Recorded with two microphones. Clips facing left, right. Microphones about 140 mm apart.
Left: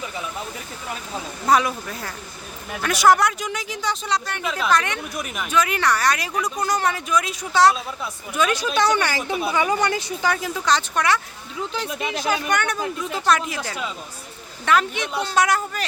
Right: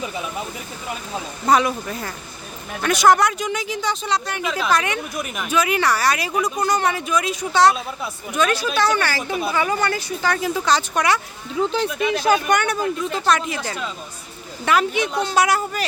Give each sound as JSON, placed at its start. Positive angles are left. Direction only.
{"t": 1.5, "sound": "speech", "side_deg": 0}
{"t": 9.0, "sound": "a woman's voice", "side_deg": 20}
{"t": 9.3, "sound": "speech", "side_deg": 0}
{"t": 9.6, "sound": "a woman's voice", "side_deg": 20}
{"t": 10.3, "sound": "speech", "side_deg": 0}
{"t": 11.9, "sound": "a woman's voice", "side_deg": 25}
{"t": 12.5, "sound": "speech", "side_deg": -10}
{"t": 13.1, "sound": "speech", "side_deg": 5}
{"t": 14.6, "sound": "speech", "side_deg": -10}